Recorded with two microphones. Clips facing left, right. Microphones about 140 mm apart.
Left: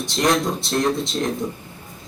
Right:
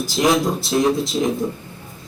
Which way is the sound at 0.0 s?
Centre (ahead or behind).